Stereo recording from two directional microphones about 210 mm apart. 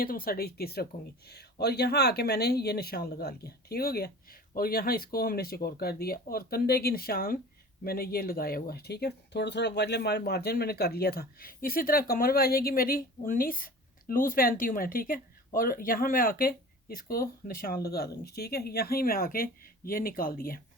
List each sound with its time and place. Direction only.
0.0 s speech: 45° left (ahead or behind)